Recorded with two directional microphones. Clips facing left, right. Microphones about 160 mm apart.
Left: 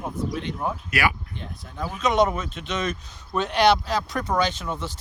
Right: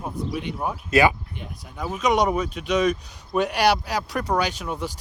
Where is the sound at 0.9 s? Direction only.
20° right (ahead or behind).